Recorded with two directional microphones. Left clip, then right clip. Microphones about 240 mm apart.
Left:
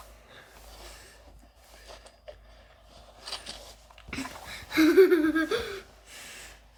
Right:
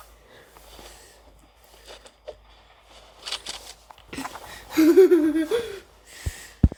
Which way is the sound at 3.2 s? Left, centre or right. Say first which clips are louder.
Right 6 dB; centre.